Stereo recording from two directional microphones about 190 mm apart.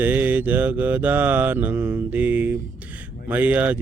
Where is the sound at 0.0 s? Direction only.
10° right (ahead or behind).